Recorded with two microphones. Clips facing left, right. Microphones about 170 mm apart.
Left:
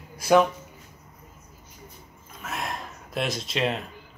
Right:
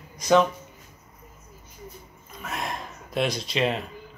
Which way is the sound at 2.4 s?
Centre (ahead or behind).